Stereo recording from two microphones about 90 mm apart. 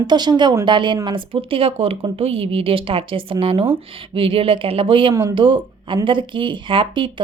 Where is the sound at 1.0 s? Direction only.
70° right (ahead or behind).